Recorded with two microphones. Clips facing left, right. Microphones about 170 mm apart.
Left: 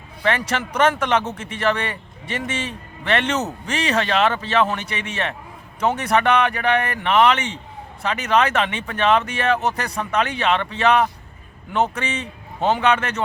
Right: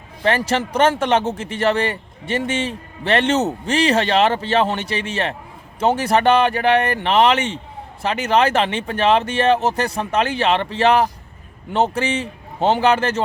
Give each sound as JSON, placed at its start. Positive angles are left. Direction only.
{"t": 0.2, "sound": "speech", "side_deg": -30}